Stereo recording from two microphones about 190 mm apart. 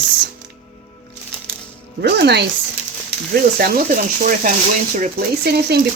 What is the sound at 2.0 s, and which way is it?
Speech, 60° right (ahead or behind).